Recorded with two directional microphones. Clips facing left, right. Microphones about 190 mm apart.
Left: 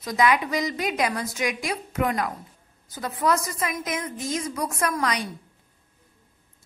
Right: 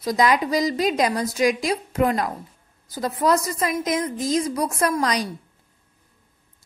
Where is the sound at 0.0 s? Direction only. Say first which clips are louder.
Right 2 dB; 35° right (ahead or behind).